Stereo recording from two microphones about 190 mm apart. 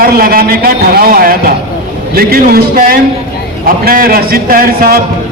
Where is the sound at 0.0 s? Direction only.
50° right (ahead or behind).